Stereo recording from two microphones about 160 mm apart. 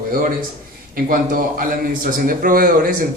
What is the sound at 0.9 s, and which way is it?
A man's voice, 60° right (ahead or behind).